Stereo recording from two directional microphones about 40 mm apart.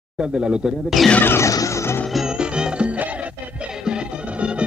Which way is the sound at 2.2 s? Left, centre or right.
Right.